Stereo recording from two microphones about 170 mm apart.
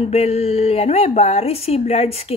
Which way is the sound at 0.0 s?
35° left (ahead or behind).